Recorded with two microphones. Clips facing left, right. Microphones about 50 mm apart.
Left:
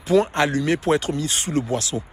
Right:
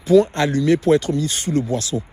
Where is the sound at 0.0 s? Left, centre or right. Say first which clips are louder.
Right 4 dB; left.